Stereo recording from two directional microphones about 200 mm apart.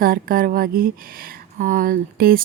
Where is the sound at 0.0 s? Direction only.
45° right (ahead or behind).